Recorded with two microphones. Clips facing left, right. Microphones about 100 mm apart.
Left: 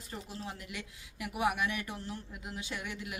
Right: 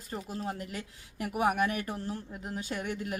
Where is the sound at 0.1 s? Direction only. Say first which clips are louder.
Right 6 dB; 45° right (ahead or behind).